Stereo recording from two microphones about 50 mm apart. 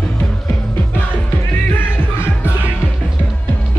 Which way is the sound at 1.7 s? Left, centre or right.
Left.